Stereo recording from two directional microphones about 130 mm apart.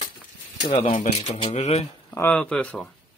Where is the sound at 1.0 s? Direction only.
55° left (ahead or behind).